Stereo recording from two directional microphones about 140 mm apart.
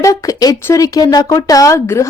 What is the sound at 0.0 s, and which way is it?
A woman's voice, 25° left (ahead or behind).